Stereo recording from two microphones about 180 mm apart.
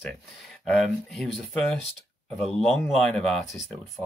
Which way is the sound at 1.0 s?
Centre (ahead or behind).